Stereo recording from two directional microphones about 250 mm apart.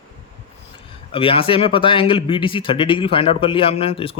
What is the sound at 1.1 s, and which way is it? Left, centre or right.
Speech, left.